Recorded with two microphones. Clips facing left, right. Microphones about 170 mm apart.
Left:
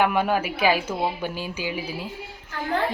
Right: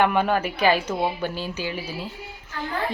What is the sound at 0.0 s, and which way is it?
A woman's voice, 5° left (ahead or behind).